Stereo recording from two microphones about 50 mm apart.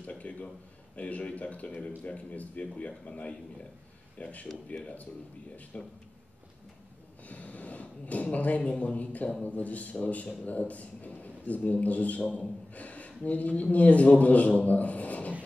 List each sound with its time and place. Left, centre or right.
0.0 s a sound: left
0.9 s speech: left
7.2 s a man's voice: left